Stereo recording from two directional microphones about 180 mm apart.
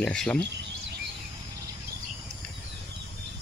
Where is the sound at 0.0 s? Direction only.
5° left (ahead or behind).